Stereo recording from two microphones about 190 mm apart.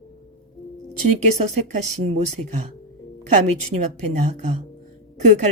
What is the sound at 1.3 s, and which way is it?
Speech, 35° right (ahead or behind).